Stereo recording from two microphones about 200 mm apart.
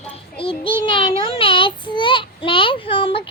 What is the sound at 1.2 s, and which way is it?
Child singing, 25° left (ahead or behind).